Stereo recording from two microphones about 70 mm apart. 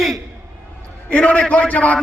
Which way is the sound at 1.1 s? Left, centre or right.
Centre.